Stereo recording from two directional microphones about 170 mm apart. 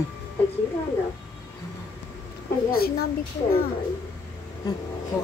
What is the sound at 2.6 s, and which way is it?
Speech, 65° left (ahead or behind).